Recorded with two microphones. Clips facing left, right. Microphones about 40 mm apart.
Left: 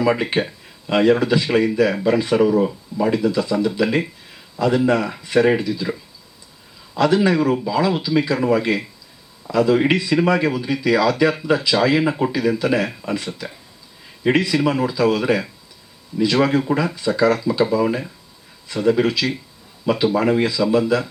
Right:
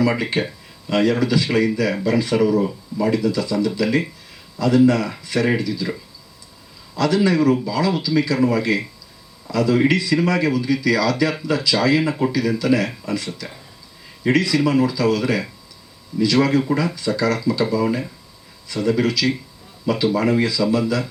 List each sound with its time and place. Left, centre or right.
0.0 s speech: left
6.9 s speech: left